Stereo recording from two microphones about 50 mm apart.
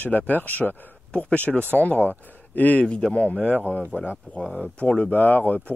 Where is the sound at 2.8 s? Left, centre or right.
Centre.